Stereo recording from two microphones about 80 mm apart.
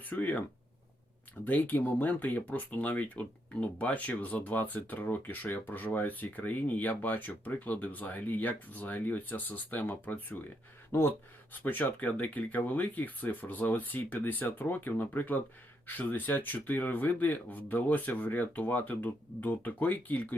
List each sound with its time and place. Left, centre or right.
0.0 s speech: left
1.5 s speech: left